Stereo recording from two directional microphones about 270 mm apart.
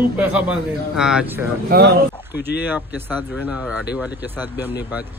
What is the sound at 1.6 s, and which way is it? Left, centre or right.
Speech, right.